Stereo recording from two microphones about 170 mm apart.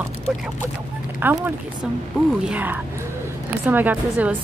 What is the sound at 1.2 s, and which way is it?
Speech, 10° right (ahead or behind).